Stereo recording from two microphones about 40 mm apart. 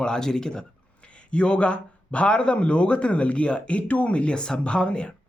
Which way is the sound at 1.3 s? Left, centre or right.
Left.